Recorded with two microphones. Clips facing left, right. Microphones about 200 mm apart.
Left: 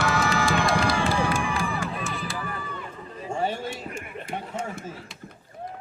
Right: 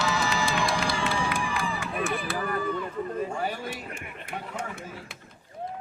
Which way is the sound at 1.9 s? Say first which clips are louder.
Right 3 dB; 60° right (ahead or behind).